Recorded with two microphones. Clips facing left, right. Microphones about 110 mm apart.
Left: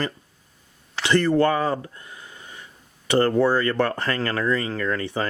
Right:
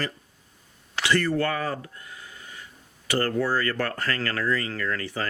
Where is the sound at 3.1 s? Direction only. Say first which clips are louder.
Left 6 dB; 25° left (ahead or behind).